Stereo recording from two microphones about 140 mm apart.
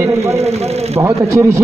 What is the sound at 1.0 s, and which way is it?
Speech, 20° right (ahead or behind).